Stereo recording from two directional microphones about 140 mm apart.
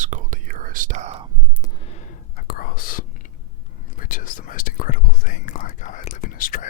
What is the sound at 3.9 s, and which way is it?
Whispering, 75° left (ahead or behind).